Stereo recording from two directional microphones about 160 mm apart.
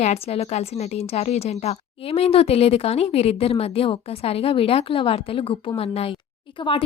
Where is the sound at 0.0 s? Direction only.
40° left (ahead or behind).